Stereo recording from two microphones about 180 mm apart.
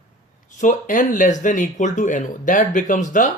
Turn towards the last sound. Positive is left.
turn(degrees=45)  # may be behind; listen again after turning